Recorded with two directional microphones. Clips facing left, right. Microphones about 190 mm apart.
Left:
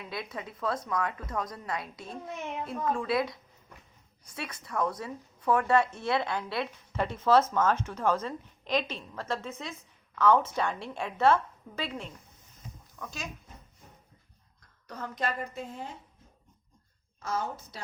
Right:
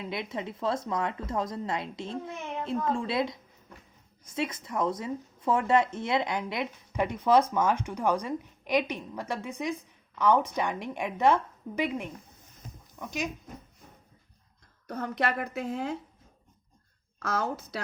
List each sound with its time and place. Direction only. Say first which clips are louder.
0.0 s a woman's voice: right 4 dB; 20° right (ahead or behind)
14.8 s a woman's voice: right 4 dB; 60° right (ahead or behind); by 16.0 s 75° right (ahead or behind)
17.2 s a woman's voice: right 3 dB; 80° right